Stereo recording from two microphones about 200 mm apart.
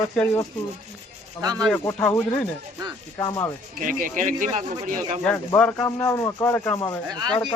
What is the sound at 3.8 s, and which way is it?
Speech, 40° right (ahead or behind).